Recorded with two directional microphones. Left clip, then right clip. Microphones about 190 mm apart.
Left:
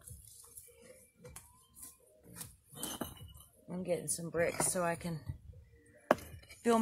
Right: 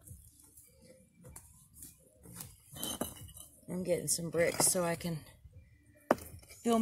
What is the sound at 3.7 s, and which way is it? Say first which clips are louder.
Speech: right 3 dB; 50° right (ahead or behind).